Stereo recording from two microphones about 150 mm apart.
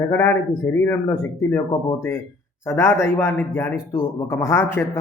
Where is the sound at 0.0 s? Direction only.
20° left (ahead or behind).